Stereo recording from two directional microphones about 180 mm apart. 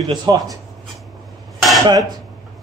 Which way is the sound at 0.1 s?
25° right (ahead or behind).